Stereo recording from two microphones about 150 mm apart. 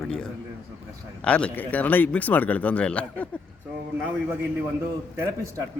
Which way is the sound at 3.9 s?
15° right (ahead or behind).